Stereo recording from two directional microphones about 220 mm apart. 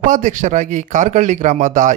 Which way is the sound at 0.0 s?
35° right (ahead or behind).